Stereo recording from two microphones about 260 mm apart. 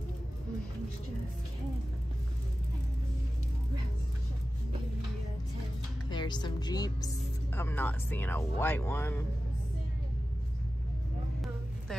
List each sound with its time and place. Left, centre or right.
6.0 s a woman's voice: centre